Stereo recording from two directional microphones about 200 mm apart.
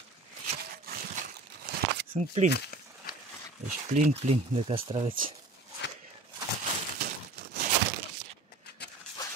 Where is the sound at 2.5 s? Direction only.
50° left (ahead or behind).